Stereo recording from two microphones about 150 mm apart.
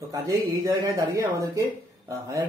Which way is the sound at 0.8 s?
20° right (ahead or behind).